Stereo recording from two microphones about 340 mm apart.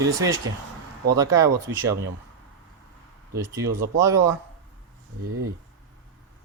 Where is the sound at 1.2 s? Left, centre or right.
Centre.